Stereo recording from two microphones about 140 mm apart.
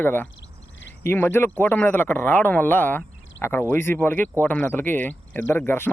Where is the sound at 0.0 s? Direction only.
15° left (ahead or behind).